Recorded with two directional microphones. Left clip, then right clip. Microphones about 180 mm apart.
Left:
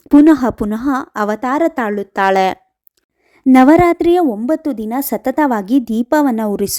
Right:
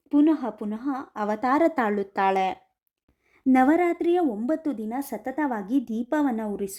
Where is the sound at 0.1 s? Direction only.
40° left (ahead or behind).